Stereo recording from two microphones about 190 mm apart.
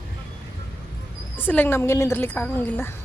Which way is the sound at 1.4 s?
10° left (ahead or behind).